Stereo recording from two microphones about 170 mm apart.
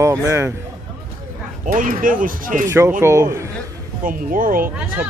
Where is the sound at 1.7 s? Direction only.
50° right (ahead or behind).